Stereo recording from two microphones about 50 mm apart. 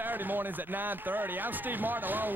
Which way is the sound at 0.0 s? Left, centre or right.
Right.